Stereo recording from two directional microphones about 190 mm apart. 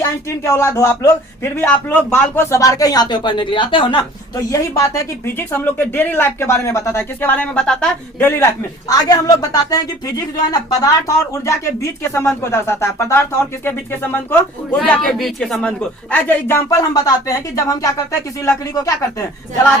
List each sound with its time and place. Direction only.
0.3 s speech: 15° left (ahead or behind)
8.9 s speech: 20° left (ahead or behind)